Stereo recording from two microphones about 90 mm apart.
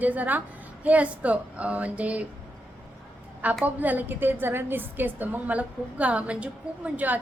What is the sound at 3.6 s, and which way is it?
A woman's voice, 20° right (ahead or behind).